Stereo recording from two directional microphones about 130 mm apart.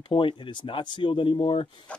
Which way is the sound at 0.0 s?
40° left (ahead or behind).